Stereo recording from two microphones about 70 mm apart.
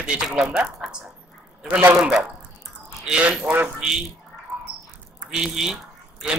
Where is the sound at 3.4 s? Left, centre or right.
Right.